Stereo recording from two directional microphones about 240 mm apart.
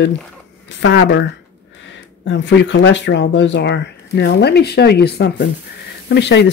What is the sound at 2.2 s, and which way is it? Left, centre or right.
Speech, left.